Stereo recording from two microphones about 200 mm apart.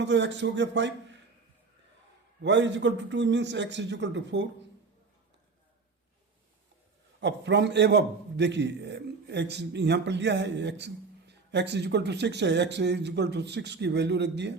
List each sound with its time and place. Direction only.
0.0 s a man's voice: 65° right (ahead or behind)
2.4 s a man's voice: 65° right (ahead or behind)
7.2 s a man's voice: 60° right (ahead or behind)